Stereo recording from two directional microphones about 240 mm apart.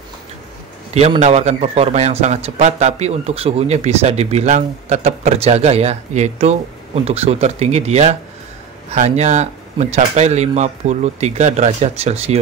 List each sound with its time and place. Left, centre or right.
0.9 s a man's voice: right